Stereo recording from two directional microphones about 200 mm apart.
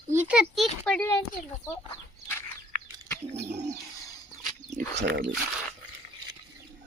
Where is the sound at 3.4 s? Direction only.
35° right (ahead or behind).